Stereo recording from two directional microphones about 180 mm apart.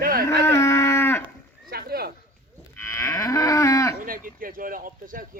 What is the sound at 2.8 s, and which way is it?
Moo, 15° left (ahead or behind).